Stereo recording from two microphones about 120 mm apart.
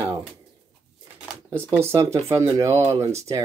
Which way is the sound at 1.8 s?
25° right (ahead or behind).